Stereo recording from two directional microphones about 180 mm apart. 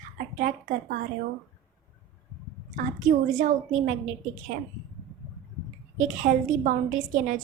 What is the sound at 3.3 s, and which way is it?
Speech, 45° right (ahead or behind).